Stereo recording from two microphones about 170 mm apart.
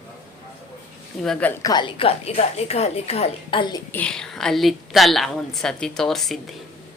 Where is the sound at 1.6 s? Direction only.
25° left (ahead or behind).